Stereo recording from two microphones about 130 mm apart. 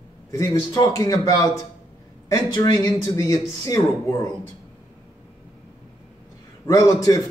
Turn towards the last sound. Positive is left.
turn(degrees=25)  # may be behind; listen again after turning